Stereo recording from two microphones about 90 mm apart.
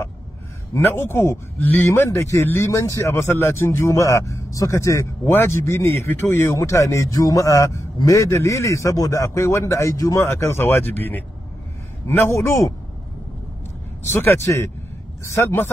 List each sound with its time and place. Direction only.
0.7 s speech: 30° left (ahead or behind)
2.4 s speech: 25° left (ahead or behind)
14.0 s speech: 30° left (ahead or behind)